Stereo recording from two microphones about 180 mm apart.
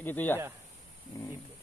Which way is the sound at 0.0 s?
10° left (ahead or behind).